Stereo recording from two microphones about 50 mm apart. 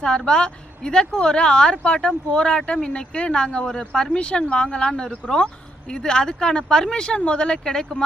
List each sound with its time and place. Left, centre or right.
0.3 s speech: centre